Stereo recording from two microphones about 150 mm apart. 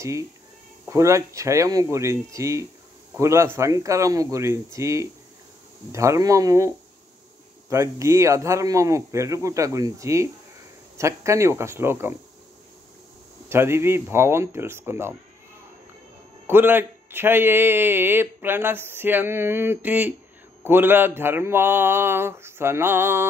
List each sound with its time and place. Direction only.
0.8 s speech: 20° right (ahead or behind)
7.7 s a man's voice: 20° right (ahead or behind)
13.5 s a man's voice: 15° right (ahead or behind)
16.4 s a man's voice: 15° right (ahead or behind)